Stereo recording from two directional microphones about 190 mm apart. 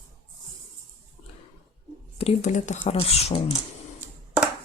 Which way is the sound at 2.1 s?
35° left (ahead or behind).